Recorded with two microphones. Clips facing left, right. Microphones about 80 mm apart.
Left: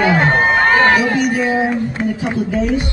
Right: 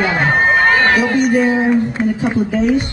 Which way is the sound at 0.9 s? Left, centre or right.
Centre.